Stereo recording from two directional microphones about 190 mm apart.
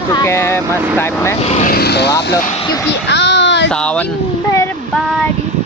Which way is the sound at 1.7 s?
60° left (ahead or behind).